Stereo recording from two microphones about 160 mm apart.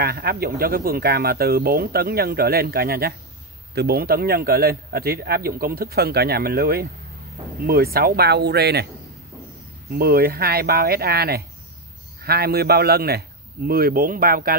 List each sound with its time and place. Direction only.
0.0 s a man's voice: 70° right (ahead or behind); by 8.8 s 90° right
9.8 s a man's voice: 70° right (ahead or behind)